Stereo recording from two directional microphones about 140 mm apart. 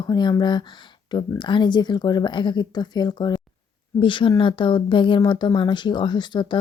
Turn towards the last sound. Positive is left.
turn(degrees=35)  # may be behind; listen again after turning